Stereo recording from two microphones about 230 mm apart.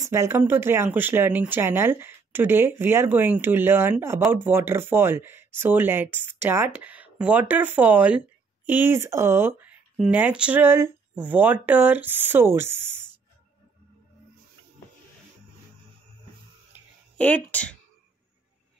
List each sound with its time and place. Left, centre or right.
0.0 s speech: centre
16.7 s a sound: centre
17.2 s speech: centre